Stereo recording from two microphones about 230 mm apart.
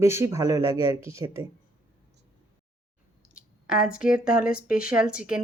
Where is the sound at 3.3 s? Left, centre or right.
Centre.